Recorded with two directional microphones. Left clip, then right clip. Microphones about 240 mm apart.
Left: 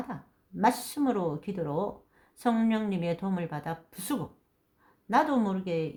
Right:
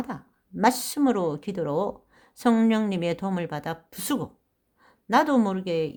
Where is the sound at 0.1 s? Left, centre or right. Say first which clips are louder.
Right 4 dB; right.